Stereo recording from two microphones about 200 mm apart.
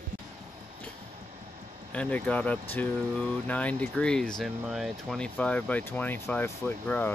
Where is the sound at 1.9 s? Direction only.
5° left (ahead or behind).